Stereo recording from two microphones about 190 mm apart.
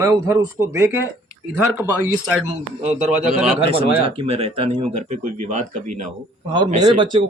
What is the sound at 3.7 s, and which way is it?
Speech, 30° right (ahead or behind).